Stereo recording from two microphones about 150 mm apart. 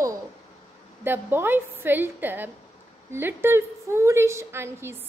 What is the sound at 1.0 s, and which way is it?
A woman's voice, 15° right (ahead or behind).